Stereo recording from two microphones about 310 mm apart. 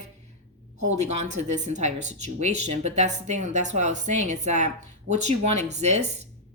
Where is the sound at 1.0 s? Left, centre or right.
Right.